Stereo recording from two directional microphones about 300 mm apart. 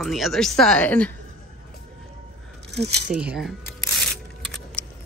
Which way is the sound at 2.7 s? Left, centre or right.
Right.